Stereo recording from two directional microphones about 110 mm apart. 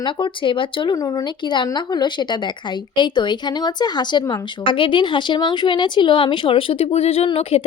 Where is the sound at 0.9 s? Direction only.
40° left (ahead or behind).